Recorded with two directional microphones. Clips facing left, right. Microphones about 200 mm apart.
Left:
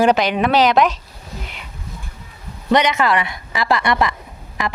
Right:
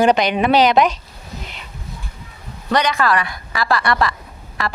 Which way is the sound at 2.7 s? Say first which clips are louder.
Left 2 dB; 20° left (ahead or behind).